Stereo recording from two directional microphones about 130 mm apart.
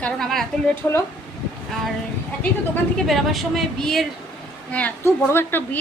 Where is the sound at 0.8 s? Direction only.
15° left (ahead or behind).